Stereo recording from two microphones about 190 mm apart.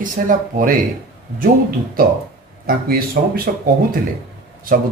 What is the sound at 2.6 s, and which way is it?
Speech, 50° right (ahead or behind).